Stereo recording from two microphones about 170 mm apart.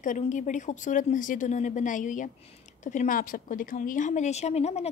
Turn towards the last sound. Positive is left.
turn(degrees=40)  # may be behind; listen again after turning